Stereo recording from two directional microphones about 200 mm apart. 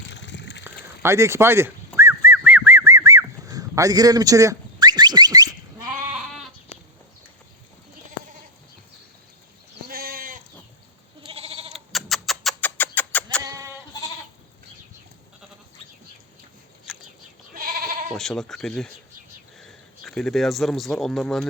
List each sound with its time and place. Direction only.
0.1 s water: 65° left (ahead or behind)
0.6 s dog: 15° right (ahead or behind)
6.1 s goat: 5° right (ahead or behind)
6.7 s a sound: 35° left (ahead or behind)
9.8 s goat: 50° right (ahead or behind)
11.2 s goat: 30° right (ahead or behind)
11.7 s a sound: centre (ahead or behind)
13.4 s goat: 15° right (ahead or behind)
17.5 s goat: 45° right (ahead or behind)
18.1 s speech: centre (ahead or behind)